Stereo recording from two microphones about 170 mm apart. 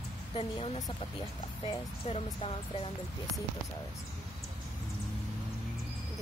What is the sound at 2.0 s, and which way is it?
Speech, 35° left (ahead or behind).